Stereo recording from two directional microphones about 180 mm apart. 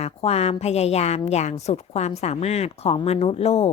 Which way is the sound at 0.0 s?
35° left (ahead or behind).